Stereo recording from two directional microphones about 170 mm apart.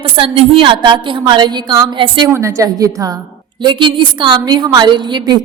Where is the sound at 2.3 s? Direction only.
15° right (ahead or behind).